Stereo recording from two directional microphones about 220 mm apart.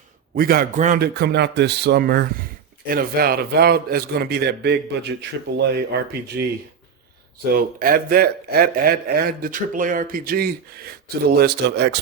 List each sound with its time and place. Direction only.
0.3 s a man's voice: 40° right (ahead or behind)
7.5 s a man's voice: 40° right (ahead or behind)